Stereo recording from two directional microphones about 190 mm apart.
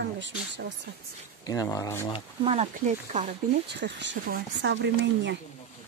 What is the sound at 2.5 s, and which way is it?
Speech, 35° right (ahead or behind).